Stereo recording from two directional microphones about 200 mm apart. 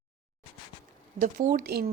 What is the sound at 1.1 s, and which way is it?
Speech, 40° right (ahead or behind).